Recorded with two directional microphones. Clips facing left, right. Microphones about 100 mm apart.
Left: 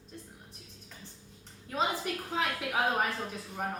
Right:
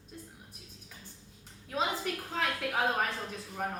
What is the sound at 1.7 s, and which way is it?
A woman's voice, centre (ahead or behind).